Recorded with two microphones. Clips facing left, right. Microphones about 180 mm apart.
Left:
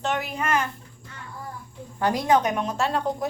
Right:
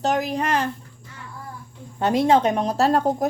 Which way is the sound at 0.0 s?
40° right (ahead or behind).